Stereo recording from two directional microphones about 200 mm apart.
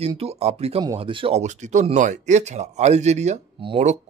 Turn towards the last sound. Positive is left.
turn(degrees=-30)  # may be behind; listen again after turning